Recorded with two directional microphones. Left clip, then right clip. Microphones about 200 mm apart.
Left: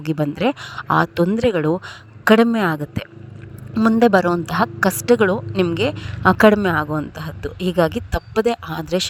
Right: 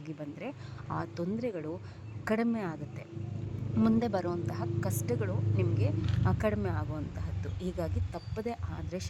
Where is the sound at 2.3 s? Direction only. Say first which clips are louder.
Left 17 dB; 25° left (ahead or behind).